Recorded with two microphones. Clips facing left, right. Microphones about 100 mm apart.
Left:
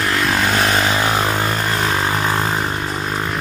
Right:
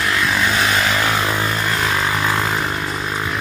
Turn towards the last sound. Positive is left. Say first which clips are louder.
# left 1 dB
turn(degrees=40)  # may be behind; listen again after turning